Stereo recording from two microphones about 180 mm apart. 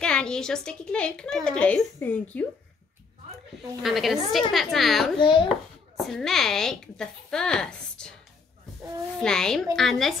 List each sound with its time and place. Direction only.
0.0 s a woman's voice: 5° left (ahead or behind)
3.8 s a woman's voice: centre (ahead or behind)
5.1 s a child's voice: 25° left (ahead or behind)
5.9 s a woman's voice: centre (ahead or behind)
9.2 s a woman's voice: 5° left (ahead or behind)